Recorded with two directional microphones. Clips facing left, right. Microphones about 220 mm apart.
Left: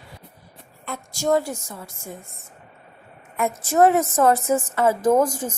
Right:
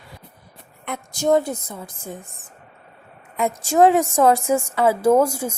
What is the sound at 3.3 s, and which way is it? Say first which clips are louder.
A woman's voice: right 2 dB; 15° right (ahead or behind).